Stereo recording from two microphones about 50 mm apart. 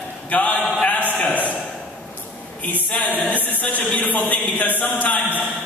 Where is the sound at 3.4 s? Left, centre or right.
Left.